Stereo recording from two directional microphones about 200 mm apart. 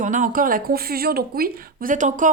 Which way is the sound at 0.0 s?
40° right (ahead or behind).